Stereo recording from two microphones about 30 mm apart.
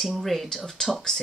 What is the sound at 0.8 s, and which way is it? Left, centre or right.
Speech, centre.